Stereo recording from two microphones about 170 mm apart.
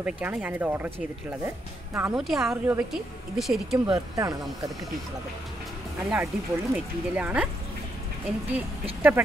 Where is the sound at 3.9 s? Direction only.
20° right (ahead or behind).